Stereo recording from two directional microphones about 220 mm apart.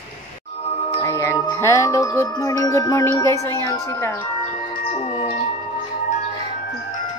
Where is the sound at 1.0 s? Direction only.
15° left (ahead or behind).